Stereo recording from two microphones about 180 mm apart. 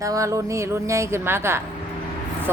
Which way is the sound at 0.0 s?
15° right (ahead or behind).